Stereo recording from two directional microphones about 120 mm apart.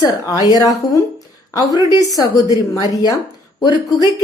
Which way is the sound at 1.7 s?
30° right (ahead or behind).